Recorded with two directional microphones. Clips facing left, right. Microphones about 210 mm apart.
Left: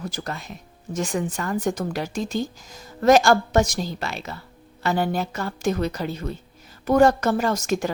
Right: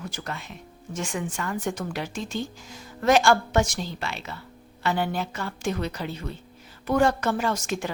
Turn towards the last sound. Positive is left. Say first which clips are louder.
# left 4 dB
turn(degrees=40)  # may be behind; listen again after turning